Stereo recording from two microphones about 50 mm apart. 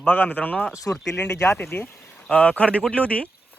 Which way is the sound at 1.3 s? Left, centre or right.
Left.